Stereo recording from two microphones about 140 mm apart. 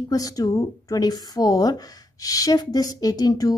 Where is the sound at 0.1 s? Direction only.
25° left (ahead or behind).